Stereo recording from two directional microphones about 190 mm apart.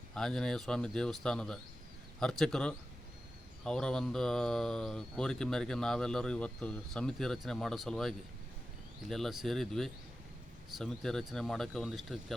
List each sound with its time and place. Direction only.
0.1 s speech: 5° left (ahead or behind)